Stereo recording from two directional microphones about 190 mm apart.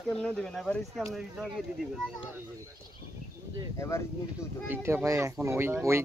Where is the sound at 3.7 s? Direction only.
15° left (ahead or behind).